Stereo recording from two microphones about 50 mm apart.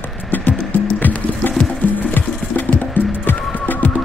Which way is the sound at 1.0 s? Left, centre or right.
Left.